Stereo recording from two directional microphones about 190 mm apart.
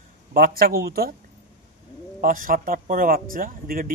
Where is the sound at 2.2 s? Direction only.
45° right (ahead or behind).